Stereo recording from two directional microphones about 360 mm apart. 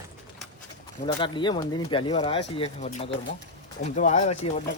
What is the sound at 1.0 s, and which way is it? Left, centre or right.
Speech, centre.